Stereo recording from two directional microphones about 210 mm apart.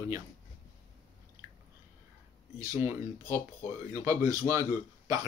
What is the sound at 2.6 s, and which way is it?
Speech, 15° right (ahead or behind).